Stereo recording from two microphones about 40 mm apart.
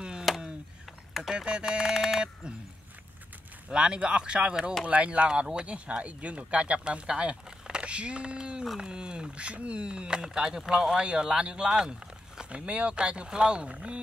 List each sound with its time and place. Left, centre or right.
0.3 s chop: centre
1.3 s a sound: right
3.7 s speech: right